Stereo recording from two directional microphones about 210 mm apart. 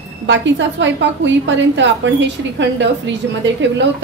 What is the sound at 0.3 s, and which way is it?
A woman's voice, 60° right (ahead or behind).